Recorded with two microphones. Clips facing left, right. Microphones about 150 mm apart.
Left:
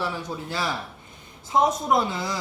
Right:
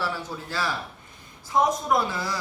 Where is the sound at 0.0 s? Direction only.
20° left (ahead or behind).